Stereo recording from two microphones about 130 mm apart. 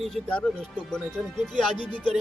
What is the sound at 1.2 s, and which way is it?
Speech, centre (ahead or behind).